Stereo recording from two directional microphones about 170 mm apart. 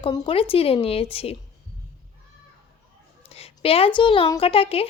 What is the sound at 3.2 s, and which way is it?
Speech, 35° left (ahead or behind).